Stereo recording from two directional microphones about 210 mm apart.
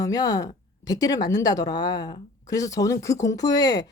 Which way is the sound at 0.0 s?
15° left (ahead or behind).